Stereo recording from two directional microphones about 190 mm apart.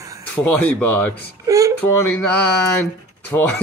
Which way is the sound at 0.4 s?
10° left (ahead or behind).